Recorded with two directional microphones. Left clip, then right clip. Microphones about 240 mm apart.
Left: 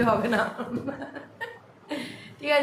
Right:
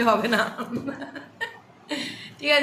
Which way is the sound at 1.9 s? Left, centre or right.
Centre.